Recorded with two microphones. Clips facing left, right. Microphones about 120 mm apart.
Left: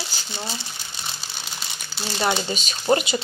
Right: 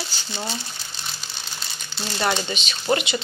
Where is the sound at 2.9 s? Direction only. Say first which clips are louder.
Left 2 dB; 35° left (ahead or behind).